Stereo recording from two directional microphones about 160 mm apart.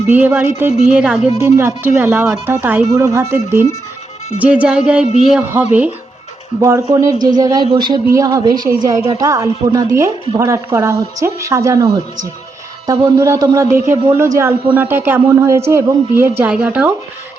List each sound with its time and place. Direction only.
0.1 s a woman's voice: 10° right (ahead or behind)